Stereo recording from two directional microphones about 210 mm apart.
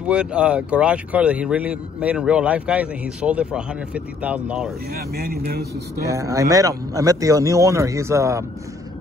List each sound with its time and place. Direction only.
0.0 s speech: 5° right (ahead or behind)
4.9 s speech: 45° right (ahead or behind)
6.0 s speech: 15° right (ahead or behind)